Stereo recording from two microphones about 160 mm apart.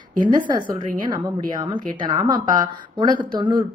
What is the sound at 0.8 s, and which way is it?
Speech, 55° right (ahead or behind).